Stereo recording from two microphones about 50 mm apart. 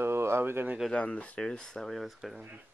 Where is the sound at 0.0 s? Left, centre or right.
Right.